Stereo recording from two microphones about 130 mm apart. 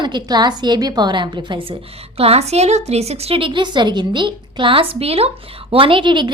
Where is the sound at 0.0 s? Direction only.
35° right (ahead or behind).